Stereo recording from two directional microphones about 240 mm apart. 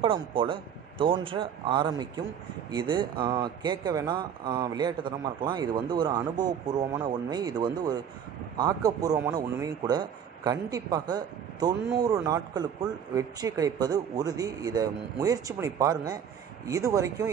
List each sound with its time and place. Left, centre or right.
0.0 s a man's voice: right